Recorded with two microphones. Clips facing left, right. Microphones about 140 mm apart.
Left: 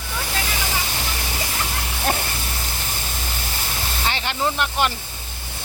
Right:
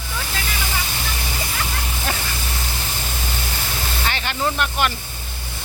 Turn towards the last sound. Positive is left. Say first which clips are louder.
# even
turn(degrees=20)  # may be behind; listen again after turning